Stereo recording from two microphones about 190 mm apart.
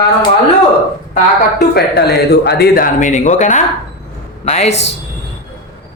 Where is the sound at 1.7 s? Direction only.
55° left (ahead or behind); by 4.9 s 35° left (ahead or behind).